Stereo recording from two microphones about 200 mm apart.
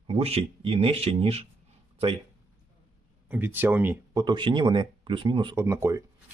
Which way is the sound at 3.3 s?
10° right (ahead or behind).